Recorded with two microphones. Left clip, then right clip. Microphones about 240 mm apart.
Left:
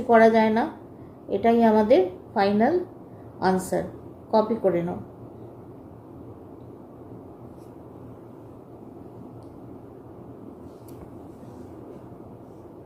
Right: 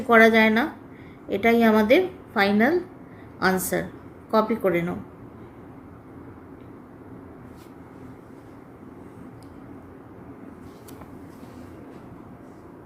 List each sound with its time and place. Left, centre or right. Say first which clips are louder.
0.1 s a woman's voice: right 1 dB; right